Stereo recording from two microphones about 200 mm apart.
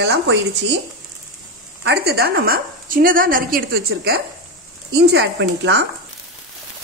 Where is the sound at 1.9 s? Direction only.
55° right (ahead or behind).